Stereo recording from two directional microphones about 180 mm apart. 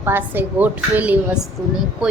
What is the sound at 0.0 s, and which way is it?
A woman's voice, 10° right (ahead or behind).